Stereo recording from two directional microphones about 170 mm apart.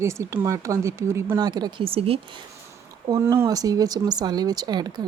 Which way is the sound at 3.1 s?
15° right (ahead or behind).